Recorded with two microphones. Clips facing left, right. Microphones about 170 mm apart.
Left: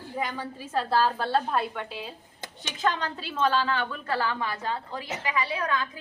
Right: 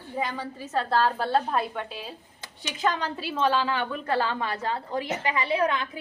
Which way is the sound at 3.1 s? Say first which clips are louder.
Right 1 dB; 10° right (ahead or behind).